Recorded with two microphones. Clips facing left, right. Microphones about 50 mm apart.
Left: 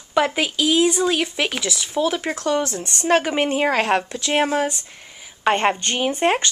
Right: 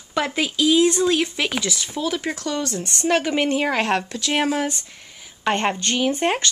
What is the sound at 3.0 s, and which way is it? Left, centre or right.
Speech, left.